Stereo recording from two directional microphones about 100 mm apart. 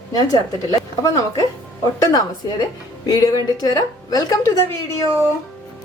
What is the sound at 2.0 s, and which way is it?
A woman's voice, 40° left (ahead or behind).